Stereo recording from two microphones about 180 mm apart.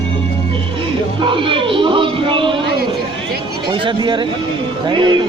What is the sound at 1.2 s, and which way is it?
Music, 30° right (ahead or behind).